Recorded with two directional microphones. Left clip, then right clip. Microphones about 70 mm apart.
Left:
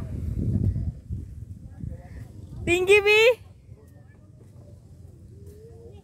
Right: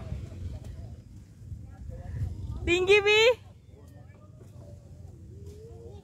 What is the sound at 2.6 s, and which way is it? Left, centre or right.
Speech, left.